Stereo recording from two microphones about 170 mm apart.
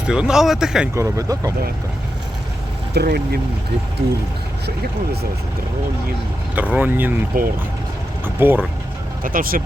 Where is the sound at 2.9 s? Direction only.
70° right (ahead or behind).